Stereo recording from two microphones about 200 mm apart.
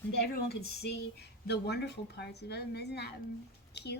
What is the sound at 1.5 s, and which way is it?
Speech, 55° left (ahead or behind).